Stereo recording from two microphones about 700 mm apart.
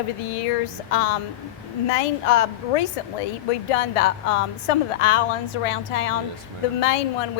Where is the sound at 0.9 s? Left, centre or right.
Left.